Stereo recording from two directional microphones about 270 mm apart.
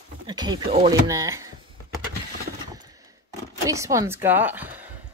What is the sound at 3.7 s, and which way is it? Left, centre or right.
A woman's voice, centre.